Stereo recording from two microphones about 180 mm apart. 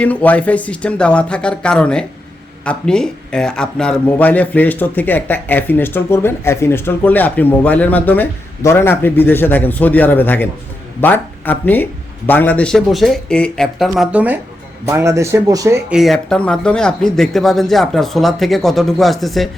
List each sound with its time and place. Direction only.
0.0 s speech: 10° left (ahead or behind); by 15.8 s 20° right (ahead or behind)
15.9 s speech: centre (ahead or behind)